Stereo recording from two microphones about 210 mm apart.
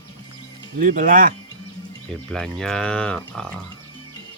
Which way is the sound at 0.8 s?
40° right (ahead or behind).